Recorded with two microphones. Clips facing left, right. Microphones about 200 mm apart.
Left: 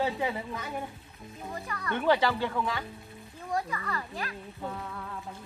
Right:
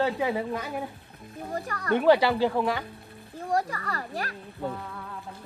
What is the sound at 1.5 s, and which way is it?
Speech, 50° right (ahead or behind).